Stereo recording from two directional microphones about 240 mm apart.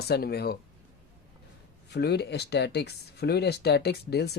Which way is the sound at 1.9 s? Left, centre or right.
Left.